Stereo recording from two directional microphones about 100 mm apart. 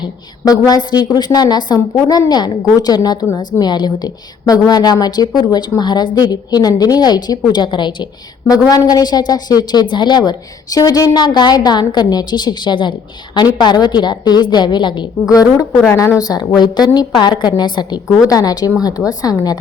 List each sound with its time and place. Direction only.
0.0 s a woman's voice: 40° left (ahead or behind)
8.7 s a woman's voice: 40° left (ahead or behind)
15.3 s a woman's voice: 35° left (ahead or behind)